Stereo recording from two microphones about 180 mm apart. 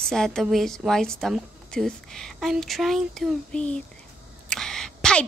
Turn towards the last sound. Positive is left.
turn(degrees=5)  # may be behind; listen again after turning